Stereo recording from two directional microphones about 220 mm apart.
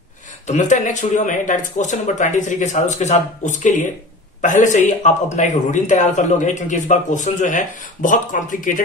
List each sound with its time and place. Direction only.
0.5 s a man's voice: 35° left (ahead or behind)